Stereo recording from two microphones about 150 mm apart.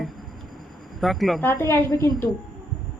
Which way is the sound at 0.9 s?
Centre (ahead or behind).